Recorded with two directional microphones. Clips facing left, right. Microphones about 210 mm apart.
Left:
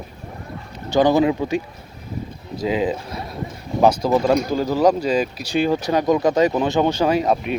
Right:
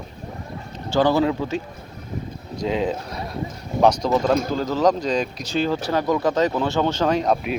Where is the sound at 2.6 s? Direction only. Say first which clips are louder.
Left 2 dB; 5° left (ahead or behind).